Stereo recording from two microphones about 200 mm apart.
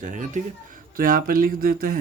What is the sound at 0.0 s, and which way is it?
Speech, 40° right (ahead or behind).